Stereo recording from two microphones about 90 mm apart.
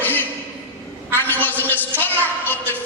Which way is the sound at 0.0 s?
20° left (ahead or behind).